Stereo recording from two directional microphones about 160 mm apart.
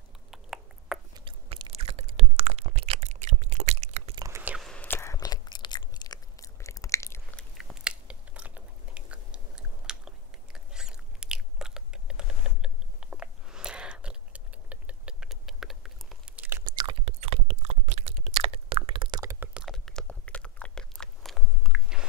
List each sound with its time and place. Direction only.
0.3 s a sound: 5° right (ahead or behind)
1.1 s chewing: 30° right (ahead or behind)
4.1 s chewing: 20° right (ahead or behind)
4.4 s whispering: 10° right (ahead or behind)
4.6 s whispering: 10° left (ahead or behind)
5.1 s a sound: 25° left (ahead or behind)
7.5 s biting: 5° right (ahead or behind)
16.6 s chewing: 30° right (ahead or behind)
19.4 s chewing: 5° right (ahead or behind)